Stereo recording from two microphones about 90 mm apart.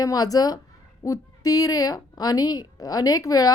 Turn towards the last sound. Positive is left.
turn(degrees=45)  # may be behind; listen again after turning